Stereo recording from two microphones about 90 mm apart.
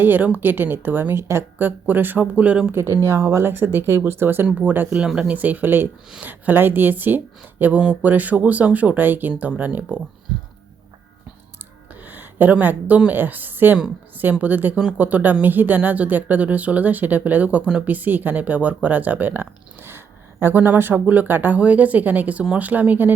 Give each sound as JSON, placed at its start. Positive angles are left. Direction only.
{"t": 0.0, "sound": "speech", "side_deg": -20}
{"t": 2.7, "sound": "speech", "side_deg": -30}
{"t": 4.9, "sound": "speech", "side_deg": -10}
{"t": 11.9, "sound": "a sound", "side_deg": -20}
{"t": 13.0, "sound": "speech", "side_deg": -20}